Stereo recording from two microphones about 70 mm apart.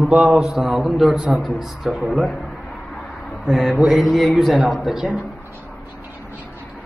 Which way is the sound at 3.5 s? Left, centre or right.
Centre.